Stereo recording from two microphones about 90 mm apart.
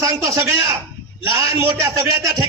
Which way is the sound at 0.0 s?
35° right (ahead or behind).